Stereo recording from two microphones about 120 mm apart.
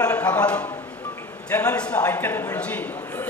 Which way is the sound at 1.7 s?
10° left (ahead or behind).